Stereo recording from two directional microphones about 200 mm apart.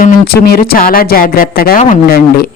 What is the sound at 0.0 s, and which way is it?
Speech, 50° left (ahead or behind).